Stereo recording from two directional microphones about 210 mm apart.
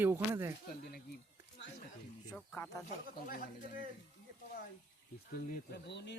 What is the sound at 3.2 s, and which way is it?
Speech, 40° left (ahead or behind).